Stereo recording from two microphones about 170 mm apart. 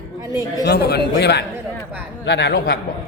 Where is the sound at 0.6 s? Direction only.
65° left (ahead or behind).